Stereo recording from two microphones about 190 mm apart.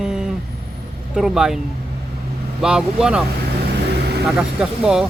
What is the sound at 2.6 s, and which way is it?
Speech, 5° right (ahead or behind).